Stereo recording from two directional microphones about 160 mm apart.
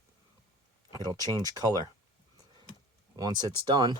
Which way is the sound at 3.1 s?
25° right (ahead or behind).